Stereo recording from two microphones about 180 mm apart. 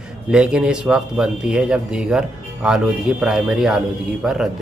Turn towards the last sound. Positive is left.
turn(degrees=0)  # may be behind; listen again after turning